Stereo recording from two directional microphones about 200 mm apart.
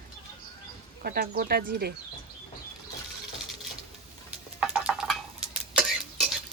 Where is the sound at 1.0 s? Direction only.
50° right (ahead or behind).